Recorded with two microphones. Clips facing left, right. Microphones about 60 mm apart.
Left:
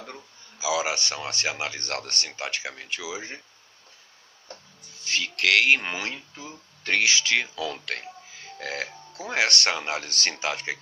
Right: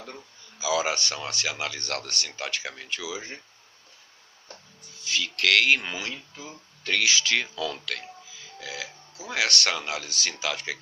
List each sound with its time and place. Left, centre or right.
0.6 s a sound: centre
0.9 s speech: left
5.0 s speech: left
5.4 s speech: left
5.9 s speech: left
8.3 s music: left
9.3 s speech: left
10.1 s speech: left
10.4 s speech: left